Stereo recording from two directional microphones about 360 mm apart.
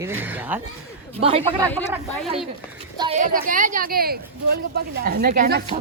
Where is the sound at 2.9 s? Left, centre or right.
Centre.